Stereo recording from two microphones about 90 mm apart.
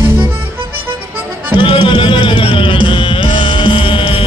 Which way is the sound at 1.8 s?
65° left (ahead or behind).